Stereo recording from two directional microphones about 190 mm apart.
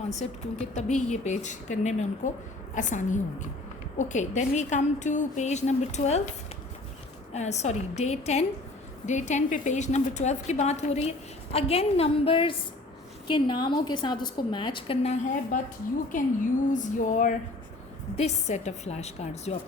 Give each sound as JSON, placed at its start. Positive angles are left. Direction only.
{"t": 0.2, "sound": "a woman's voice", "side_deg": 35}
{"t": 7.3, "sound": "a woman's voice", "side_deg": 35}
{"t": 16.7, "sound": "a sound", "side_deg": 40}
{"t": 18.2, "sound": "a woman's voice", "side_deg": 35}